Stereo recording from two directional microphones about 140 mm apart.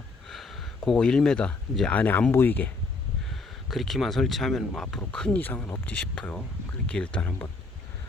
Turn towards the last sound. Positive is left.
turn(degrees=10)  # may be behind; listen again after turning